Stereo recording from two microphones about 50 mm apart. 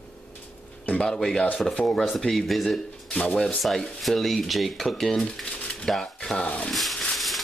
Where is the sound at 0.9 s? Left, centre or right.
Centre.